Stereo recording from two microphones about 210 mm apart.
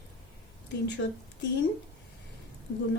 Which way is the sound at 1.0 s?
55° left (ahead or behind).